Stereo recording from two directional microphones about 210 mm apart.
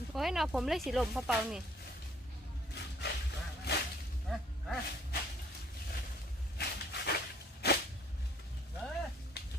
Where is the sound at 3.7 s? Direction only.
50° left (ahead or behind).